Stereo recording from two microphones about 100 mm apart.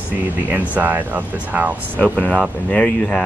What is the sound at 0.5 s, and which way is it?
Speech, 15° right (ahead or behind).